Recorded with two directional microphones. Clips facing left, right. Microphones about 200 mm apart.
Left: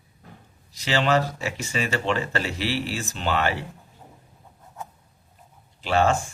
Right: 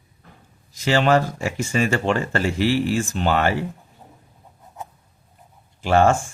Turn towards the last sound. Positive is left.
turn(degrees=-50)  # may be behind; listen again after turning